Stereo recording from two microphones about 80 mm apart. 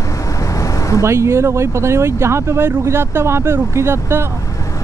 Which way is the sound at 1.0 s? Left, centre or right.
Right.